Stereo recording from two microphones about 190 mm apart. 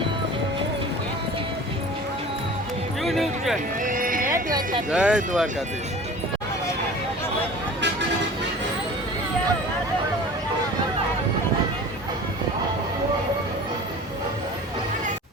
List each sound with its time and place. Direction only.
3.0 s music: centre (ahead or behind)
3.8 s horse: 45° right (ahead or behind)
4.9 s speech: 5° right (ahead or behind)